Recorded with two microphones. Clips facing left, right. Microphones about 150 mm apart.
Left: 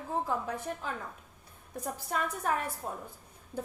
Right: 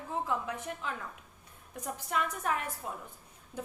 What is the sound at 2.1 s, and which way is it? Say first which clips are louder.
Speech: left 1 dB; 35° left (ahead or behind).